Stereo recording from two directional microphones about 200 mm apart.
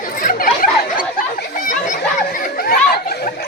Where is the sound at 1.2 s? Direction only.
45° left (ahead or behind).